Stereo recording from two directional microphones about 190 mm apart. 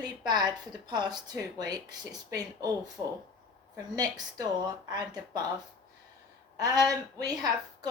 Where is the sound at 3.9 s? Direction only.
20° right (ahead or behind).